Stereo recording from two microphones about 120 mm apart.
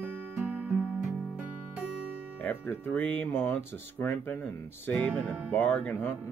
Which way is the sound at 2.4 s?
15° left (ahead or behind).